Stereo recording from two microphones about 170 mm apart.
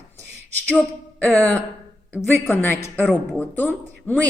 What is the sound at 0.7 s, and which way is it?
A woman's voice, 10° left (ahead or behind).